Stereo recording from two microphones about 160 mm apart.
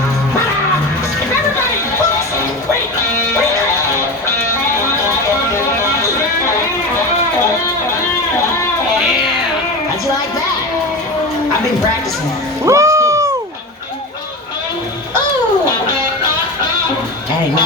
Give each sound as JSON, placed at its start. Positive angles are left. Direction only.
{"t": 12.6, "sound": "cat", "side_deg": -20}